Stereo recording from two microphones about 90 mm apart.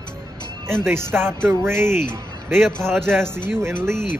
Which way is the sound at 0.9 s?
30° right (ahead or behind).